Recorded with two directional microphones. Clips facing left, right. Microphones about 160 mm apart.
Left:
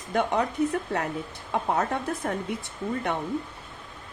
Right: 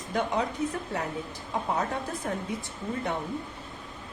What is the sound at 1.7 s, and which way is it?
Speech, 65° left (ahead or behind).